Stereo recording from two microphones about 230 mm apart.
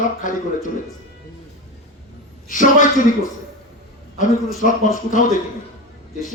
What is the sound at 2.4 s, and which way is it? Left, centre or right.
Speech, left.